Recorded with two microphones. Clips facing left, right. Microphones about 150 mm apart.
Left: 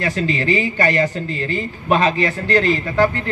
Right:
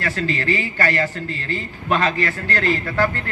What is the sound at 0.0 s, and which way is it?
Speech, 20° left (ahead or behind).